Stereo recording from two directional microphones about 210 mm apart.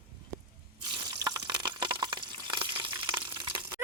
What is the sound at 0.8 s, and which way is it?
Water, 20° right (ahead or behind).